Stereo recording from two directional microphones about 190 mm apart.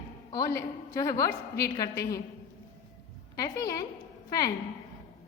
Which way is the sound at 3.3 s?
15° left (ahead or behind).